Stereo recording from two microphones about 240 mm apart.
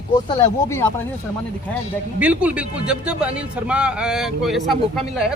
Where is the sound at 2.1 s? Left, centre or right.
Centre.